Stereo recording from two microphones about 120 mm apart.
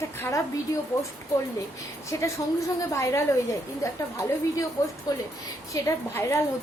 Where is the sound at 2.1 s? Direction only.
25° left (ahead or behind).